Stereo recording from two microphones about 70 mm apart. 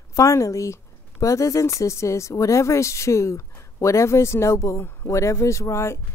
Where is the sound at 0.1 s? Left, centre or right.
Left.